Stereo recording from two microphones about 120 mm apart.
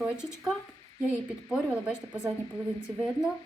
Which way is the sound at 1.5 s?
5° right (ahead or behind).